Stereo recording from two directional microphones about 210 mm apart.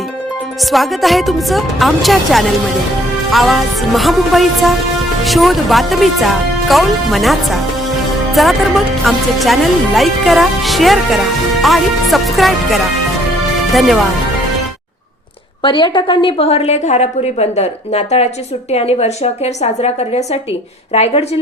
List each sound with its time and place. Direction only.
0.6 s speech: centre (ahead or behind)
15.6 s a woman's voice: 25° left (ahead or behind)